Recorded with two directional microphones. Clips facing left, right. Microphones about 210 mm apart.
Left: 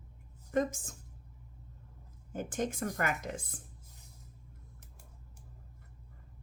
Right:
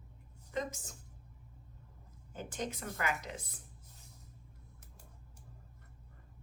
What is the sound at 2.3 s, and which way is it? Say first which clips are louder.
Speech: left 6 dB; 50° left (ahead or behind).